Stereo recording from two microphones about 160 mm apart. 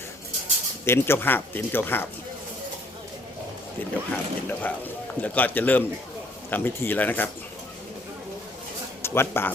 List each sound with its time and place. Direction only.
0.9 s speech: 15° left (ahead or behind)
4.1 s speech: 10° left (ahead or behind)
9.0 s speech: 15° left (ahead or behind)